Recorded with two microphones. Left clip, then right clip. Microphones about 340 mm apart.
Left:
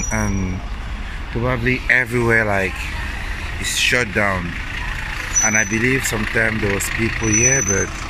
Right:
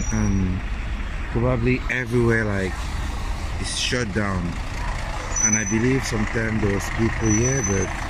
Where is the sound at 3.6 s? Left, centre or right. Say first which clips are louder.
Left 8 dB; centre.